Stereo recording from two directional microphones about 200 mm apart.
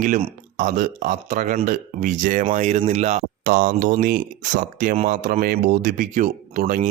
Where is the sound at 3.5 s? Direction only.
50° right (ahead or behind).